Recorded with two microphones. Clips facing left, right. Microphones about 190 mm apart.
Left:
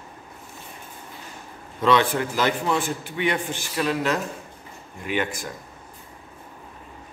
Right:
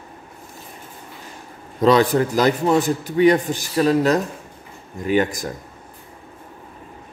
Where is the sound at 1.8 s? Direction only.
40° right (ahead or behind).